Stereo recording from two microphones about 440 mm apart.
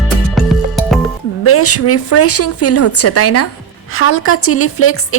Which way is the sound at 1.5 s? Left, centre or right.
Left.